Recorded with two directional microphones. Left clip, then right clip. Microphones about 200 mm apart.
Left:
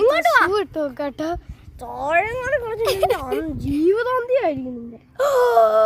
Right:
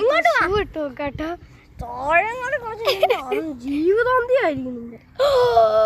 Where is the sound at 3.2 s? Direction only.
45° left (ahead or behind).